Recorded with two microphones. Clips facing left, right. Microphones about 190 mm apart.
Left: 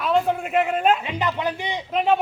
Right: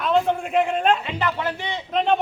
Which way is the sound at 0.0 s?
5° left (ahead or behind).